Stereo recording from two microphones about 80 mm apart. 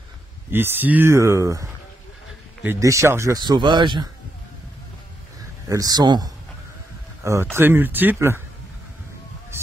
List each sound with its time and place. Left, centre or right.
0.5 s speech: right
1.1 s speech: right
2.8 s speech: right
3.3 s speech: right
5.7 s a man's voice: right
7.5 s speech: right